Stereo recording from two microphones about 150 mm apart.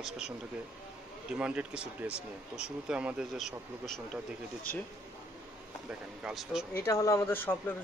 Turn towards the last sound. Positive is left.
turn(degrees=15)  # may be behind; listen again after turning